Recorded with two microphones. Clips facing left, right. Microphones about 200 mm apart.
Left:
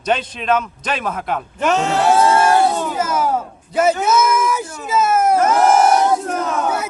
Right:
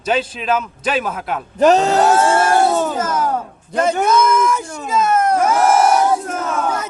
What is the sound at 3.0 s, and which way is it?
Speech, 10° left (ahead or behind).